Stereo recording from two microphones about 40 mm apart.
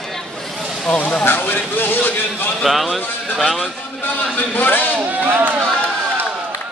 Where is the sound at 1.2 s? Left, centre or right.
Left.